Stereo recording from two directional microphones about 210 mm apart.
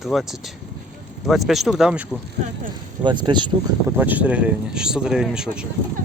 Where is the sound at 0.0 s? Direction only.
Centre (ahead or behind).